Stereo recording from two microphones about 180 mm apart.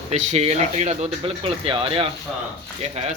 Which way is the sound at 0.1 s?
40° right (ahead or behind).